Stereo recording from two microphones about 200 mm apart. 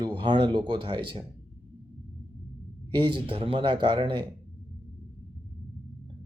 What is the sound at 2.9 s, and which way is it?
Speech, 25° right (ahead or behind).